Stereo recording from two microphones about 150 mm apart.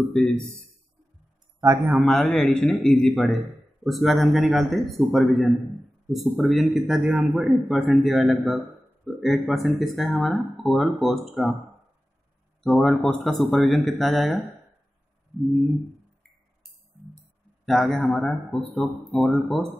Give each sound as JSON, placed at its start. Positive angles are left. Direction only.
{"t": 1.6, "sound": "a man's voice", "side_deg": -20}
{"t": 2.0, "sound": "speech", "side_deg": 0}
{"t": 12.6, "sound": "speech", "side_deg": 0}
{"t": 17.6, "sound": "speech", "side_deg": 0}